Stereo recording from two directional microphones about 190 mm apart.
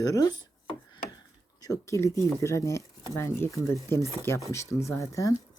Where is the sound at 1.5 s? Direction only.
20° left (ahead or behind).